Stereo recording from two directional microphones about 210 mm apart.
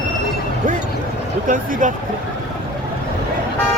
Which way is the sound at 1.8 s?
35° right (ahead or behind).